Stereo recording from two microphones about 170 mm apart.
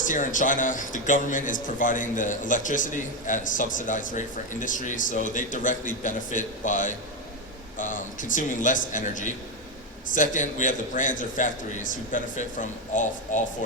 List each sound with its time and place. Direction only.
0.0 s a man's voice: 50° left (ahead or behind)